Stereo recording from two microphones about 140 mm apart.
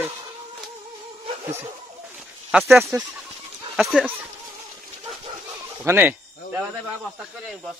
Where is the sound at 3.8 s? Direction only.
5° right (ahead or behind).